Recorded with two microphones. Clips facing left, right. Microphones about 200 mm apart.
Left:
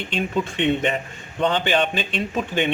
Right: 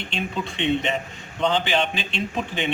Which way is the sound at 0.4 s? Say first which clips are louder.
Left 2 dB; 50° left (ahead or behind).